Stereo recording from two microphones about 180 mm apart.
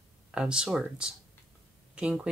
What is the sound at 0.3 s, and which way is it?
Speech, 5° right (ahead or behind).